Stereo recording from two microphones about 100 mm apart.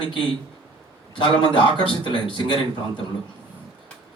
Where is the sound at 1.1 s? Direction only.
55° left (ahead or behind).